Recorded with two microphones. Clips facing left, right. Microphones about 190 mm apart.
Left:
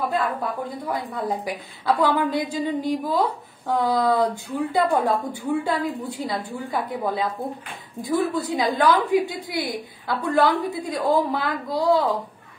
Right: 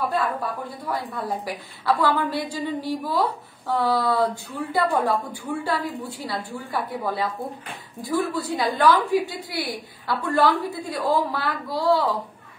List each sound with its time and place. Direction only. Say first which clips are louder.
0.1 s a woman's voice: left 1 dB; 20° left (ahead or behind)